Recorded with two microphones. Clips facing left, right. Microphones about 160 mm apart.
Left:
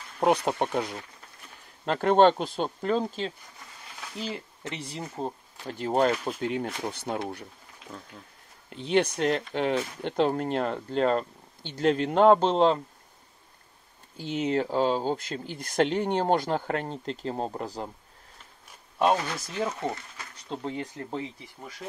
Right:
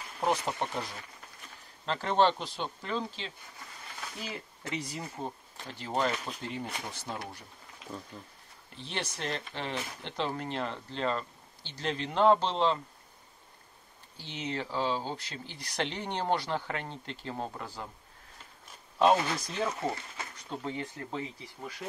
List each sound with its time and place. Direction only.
0.2 s speech: 60° left (ahead or behind); by 3.3 s 40° left (ahead or behind)
4.8 s speech: 30° left (ahead or behind)
5.7 s speech: 50° left (ahead or behind)
6.4 s speech: 65° left (ahead or behind)
8.9 s speech: 60° left (ahead or behind); by 12.8 s 45° left (ahead or behind)
14.2 s speech: 45° left (ahead or behind)
18.9 s speech: 5° left (ahead or behind)
20.4 s speech: 30° left (ahead or behind)